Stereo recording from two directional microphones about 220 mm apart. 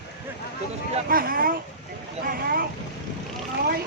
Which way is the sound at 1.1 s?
40° right (ahead or behind).